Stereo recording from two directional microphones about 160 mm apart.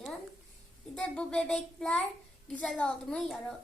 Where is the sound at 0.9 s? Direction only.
5° left (ahead or behind).